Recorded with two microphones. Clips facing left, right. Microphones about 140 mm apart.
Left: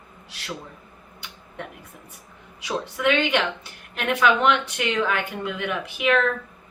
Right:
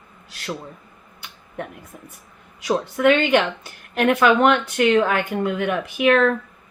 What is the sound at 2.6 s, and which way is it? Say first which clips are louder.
Speech: right 6 dB; 50° right (ahead or behind).